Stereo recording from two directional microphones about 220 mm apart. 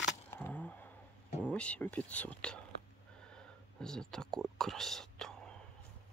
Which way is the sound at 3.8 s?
Centre (ahead or behind).